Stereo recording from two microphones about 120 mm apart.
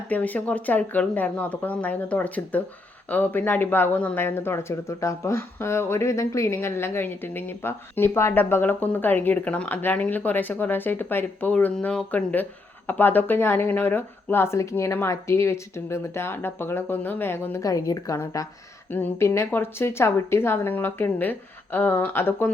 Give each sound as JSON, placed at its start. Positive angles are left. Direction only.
{"t": 0.1, "sound": "speech", "side_deg": 10}
{"t": 18.9, "sound": "speech", "side_deg": 15}